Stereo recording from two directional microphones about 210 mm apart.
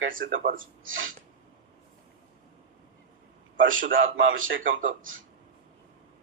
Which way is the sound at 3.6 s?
65° right (ahead or behind).